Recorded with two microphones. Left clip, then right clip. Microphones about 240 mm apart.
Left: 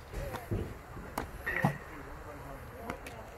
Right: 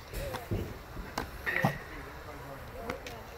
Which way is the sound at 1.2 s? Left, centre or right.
Centre.